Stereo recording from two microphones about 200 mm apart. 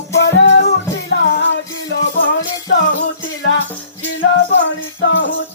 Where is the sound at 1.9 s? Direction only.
60° left (ahead or behind).